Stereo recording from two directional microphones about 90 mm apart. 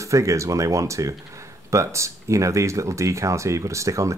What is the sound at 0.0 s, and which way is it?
Speech, 35° right (ahead or behind).